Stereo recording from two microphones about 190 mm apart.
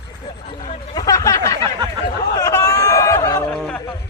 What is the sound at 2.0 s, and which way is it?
Chatter, 20° left (ahead or behind).